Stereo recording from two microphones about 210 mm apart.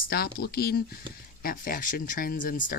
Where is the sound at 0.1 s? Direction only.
45° left (ahead or behind).